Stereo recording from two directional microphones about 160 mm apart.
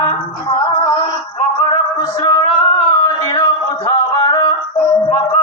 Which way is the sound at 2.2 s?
25° left (ahead or behind).